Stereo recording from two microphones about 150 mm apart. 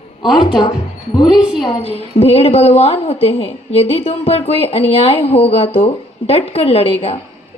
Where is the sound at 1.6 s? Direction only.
40° left (ahead or behind).